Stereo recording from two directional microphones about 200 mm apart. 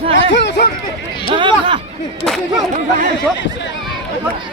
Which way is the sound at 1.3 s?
25° right (ahead or behind).